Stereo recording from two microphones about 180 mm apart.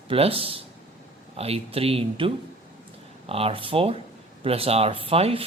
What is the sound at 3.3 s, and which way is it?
Speech, 30° right (ahead or behind).